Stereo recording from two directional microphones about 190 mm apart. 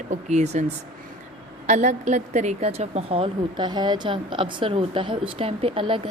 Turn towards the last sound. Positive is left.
turn(degrees=-30)  # may be behind; listen again after turning